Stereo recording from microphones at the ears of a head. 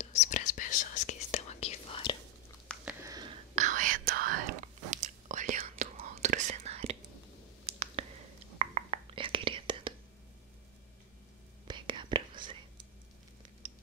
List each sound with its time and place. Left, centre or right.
0.0 s whispering: left
3.3 s whispering: right
11.6 s whispering: right